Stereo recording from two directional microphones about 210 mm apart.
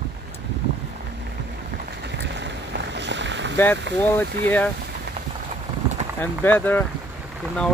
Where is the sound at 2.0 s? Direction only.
55° right (ahead or behind).